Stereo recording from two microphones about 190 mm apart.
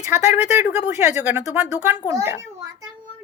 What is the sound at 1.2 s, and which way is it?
A child's voice, 10° right (ahead or behind).